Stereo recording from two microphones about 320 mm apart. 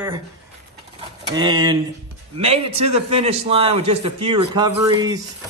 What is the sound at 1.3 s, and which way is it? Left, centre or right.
A man's voice, centre.